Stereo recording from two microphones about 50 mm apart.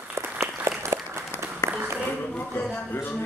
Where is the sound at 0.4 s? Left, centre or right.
Right.